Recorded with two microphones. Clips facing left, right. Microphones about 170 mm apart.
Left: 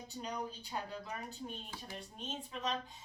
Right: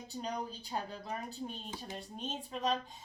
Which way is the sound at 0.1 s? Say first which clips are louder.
Right 3 dB; 35° right (ahead or behind).